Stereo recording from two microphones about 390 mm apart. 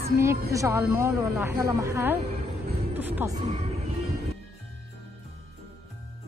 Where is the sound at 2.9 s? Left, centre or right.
Centre.